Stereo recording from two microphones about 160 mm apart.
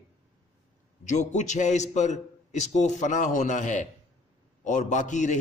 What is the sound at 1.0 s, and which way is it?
A man's voice, 50° left (ahead or behind).